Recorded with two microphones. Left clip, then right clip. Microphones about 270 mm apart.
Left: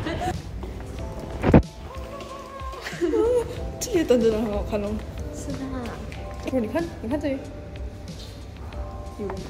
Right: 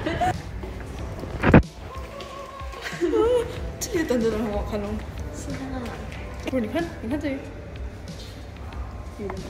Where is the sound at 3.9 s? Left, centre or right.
Centre.